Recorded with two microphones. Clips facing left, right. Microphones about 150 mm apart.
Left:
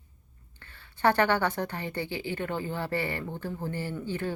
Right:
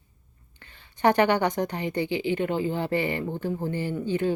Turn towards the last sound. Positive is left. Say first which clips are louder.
# right 6 dB
turn(degrees=-15)  # may be behind; listen again after turning